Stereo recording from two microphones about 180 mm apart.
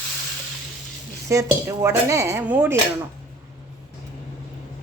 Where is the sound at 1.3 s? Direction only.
15° right (ahead or behind).